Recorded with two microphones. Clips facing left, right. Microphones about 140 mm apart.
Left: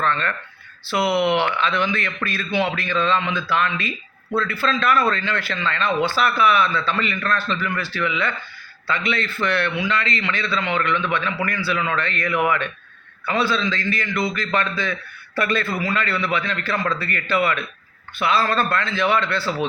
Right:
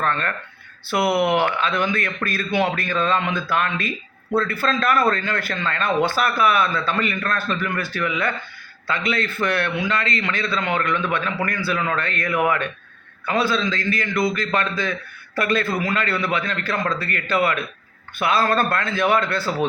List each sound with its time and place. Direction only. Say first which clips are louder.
0.0 s speech: left 1 dB; 45° right (ahead or behind)